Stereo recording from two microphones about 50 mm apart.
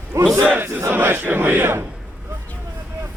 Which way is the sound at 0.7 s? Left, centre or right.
Right.